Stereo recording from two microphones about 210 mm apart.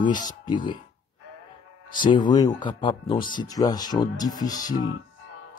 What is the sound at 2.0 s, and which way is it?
Speech, 20° left (ahead or behind).